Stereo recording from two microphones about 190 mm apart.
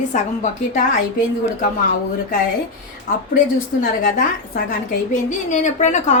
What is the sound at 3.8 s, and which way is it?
A woman's voice, 50° left (ahead or behind).